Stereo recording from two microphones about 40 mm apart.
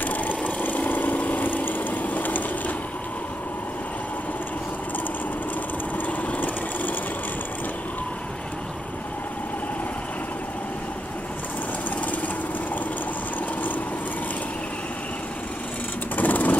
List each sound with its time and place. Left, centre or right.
0.0 s engine: left
6.0 s vehicle: left
16.2 s vehicle: left